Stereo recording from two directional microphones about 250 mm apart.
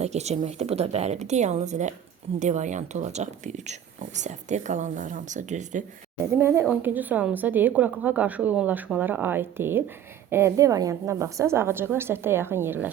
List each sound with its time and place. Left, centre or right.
0.0 s a woman's voice: right
6.3 s a woman's voice: centre